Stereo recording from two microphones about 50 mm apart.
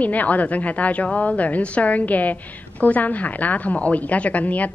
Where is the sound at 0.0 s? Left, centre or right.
Left.